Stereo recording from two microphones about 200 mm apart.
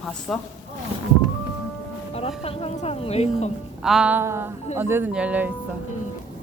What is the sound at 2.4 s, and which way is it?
A woman's voice, 30° left (ahead or behind).